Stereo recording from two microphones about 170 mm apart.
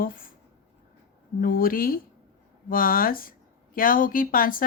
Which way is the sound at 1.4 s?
55° left (ahead or behind).